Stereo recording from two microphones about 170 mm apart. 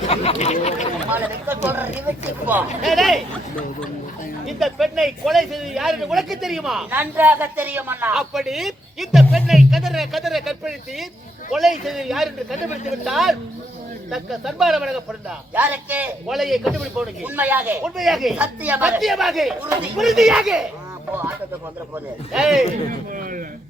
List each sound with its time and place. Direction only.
0.1 s speech: 40° left (ahead or behind)
1.1 s speech: 10° right (ahead or behind)
2.8 s speech: centre (ahead or behind)
4.4 s speech: centre (ahead or behind)
21.9 s speech: 5° right (ahead or behind)
22.6 s a man's voice: 50° right (ahead or behind)